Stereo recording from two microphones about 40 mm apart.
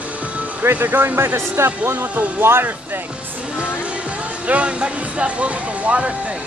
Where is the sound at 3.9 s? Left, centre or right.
Right.